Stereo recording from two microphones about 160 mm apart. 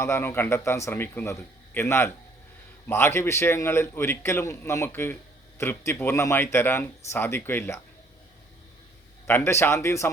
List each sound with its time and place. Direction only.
0.0 s a man's voice: 15° left (ahead or behind)
9.2 s a man's voice: 15° left (ahead or behind)